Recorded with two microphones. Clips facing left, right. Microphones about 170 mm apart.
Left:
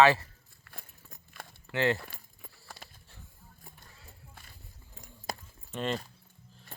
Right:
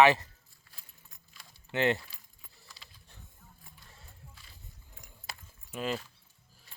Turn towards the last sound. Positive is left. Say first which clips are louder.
# left 1 dB
turn(degrees=-5)  # may be behind; listen again after turning